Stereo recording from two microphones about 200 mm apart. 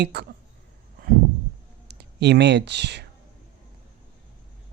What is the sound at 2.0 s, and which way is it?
Speech, 55° right (ahead or behind).